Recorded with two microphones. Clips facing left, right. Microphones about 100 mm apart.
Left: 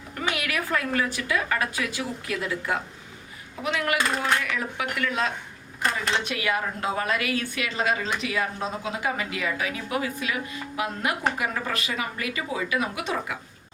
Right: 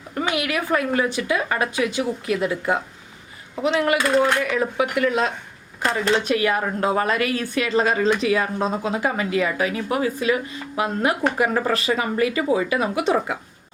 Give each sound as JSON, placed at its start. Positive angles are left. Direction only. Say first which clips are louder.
{"t": 0.1, "sound": "a woman's voice", "louder": "right 5 dB", "side_deg": -25}
{"t": 6.2, "sound": "speech", "louder": "right 6 dB", "side_deg": -40}